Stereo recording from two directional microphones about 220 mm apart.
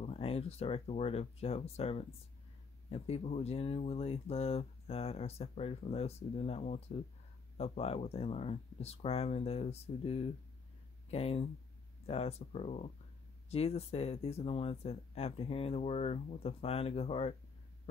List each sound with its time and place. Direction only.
0.0 s speech: 25° left (ahead or behind)